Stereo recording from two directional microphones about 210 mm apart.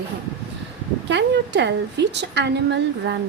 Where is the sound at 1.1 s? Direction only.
55° right (ahead or behind).